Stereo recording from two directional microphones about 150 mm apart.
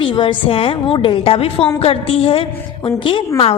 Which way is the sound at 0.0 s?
30° left (ahead or behind).